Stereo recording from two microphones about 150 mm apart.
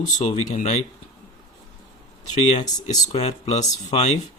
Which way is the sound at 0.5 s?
50° left (ahead or behind).